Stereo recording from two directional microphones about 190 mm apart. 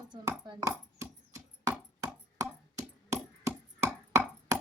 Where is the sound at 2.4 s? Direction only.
15° right (ahead or behind).